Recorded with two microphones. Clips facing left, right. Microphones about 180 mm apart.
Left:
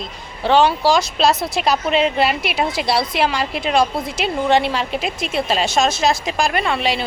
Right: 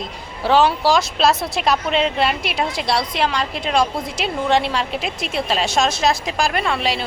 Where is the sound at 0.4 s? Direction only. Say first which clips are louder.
Left 1 dB; centre (ahead or behind).